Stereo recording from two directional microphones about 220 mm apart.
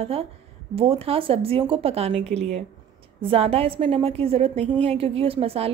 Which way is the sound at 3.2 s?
25° right (ahead or behind).